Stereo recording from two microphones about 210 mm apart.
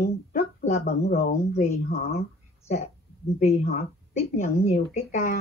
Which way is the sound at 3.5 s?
45° left (ahead or behind).